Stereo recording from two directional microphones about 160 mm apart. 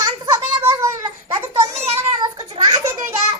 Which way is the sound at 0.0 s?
20° right (ahead or behind).